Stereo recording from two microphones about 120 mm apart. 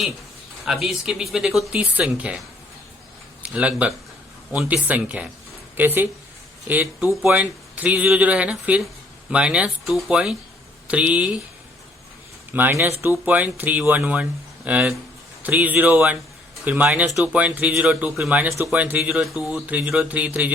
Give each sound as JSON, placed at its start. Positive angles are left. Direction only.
{"t": 0.6, "sound": "speech", "side_deg": 0}
{"t": 3.4, "sound": "speech", "side_deg": -10}
{"t": 12.5, "sound": "speech", "side_deg": -15}